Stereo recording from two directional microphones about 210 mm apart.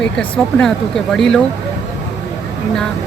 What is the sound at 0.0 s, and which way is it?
Speech, 5° left (ahead or behind).